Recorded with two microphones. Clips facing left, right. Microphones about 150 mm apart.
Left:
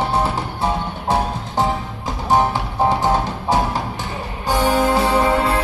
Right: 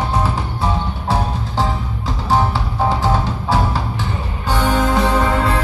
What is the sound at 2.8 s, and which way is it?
Music, 20° left (ahead or behind).